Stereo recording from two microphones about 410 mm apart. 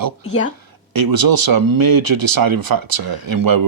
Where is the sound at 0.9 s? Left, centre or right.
Right.